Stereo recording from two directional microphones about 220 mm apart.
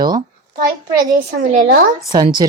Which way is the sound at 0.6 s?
40° right (ahead or behind).